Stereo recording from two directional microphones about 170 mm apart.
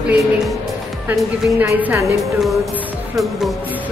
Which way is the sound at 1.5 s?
15° right (ahead or behind).